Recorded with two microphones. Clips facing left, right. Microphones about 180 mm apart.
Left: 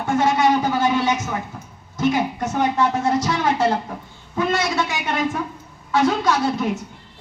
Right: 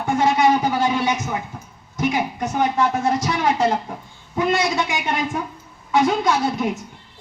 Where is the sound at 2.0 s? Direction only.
15° right (ahead or behind).